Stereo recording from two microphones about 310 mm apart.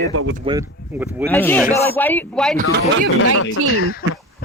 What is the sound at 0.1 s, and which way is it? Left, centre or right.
Speech, right.